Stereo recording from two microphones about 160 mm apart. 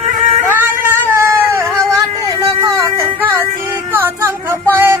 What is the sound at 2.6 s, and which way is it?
Music, 20° right (ahead or behind).